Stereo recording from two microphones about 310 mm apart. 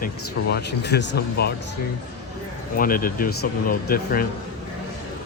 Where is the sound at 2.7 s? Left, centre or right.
Left.